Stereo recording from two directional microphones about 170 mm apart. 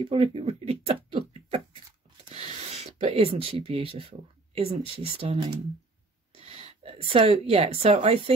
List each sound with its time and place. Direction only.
0.0 s speech: 35° right (ahead or behind)
3.0 s speech: 35° right (ahead or behind)